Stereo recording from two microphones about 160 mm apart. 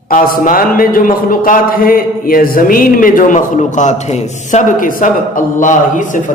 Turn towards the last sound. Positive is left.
turn(degrees=55)  # may be behind; listen again after turning